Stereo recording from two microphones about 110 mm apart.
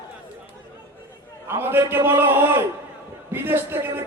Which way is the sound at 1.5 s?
20° right (ahead or behind).